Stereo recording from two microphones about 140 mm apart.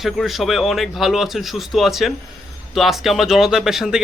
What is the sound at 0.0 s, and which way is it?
Speech, centre (ahead or behind).